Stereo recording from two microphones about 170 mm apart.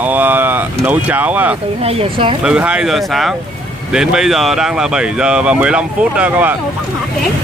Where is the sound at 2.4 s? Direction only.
5° right (ahead or behind).